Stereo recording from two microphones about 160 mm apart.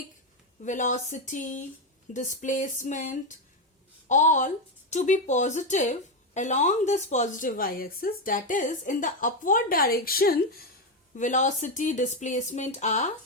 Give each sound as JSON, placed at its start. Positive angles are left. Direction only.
{"t": 0.6, "sound": "a woman's voice", "side_deg": 50}
{"t": 11.1, "sound": "speech", "side_deg": 50}